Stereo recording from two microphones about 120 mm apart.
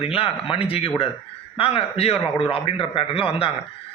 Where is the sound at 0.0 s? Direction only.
50° left (ahead or behind).